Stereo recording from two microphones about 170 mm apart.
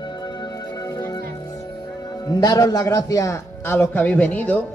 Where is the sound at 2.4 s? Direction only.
25° left (ahead or behind).